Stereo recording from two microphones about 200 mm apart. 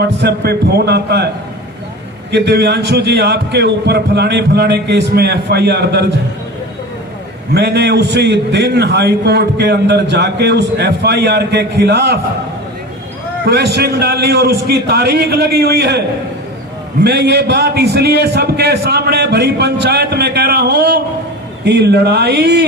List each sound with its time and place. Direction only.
0.2 s a man's voice: 55° right (ahead or behind)
2.3 s a man's voice: 55° right (ahead or behind)
7.5 s a man's voice: 55° right (ahead or behind)
13.4 s a man's voice: 55° right (ahead or behind)